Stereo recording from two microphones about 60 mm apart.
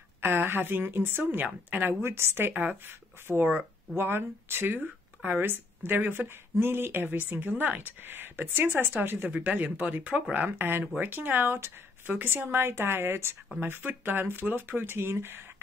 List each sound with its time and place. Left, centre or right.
0.2 s speech: right
2.6 s speech: right
2.9 s speech: right